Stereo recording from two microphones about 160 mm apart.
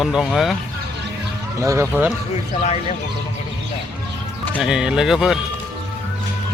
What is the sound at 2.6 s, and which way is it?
Speech, 45° left (ahead or behind).